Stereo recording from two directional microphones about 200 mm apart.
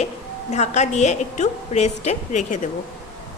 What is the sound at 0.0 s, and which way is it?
A woman's voice, 35° left (ahead or behind).